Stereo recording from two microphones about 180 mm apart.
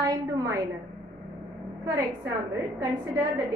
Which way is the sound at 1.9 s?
20° right (ahead or behind).